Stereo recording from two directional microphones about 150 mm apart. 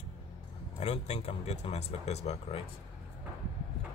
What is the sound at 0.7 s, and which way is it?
Speech, 45° left (ahead or behind).